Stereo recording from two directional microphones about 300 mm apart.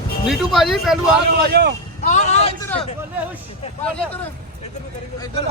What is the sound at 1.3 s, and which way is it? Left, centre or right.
Speech, right.